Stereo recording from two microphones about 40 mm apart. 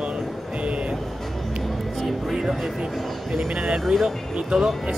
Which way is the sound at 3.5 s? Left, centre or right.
Right.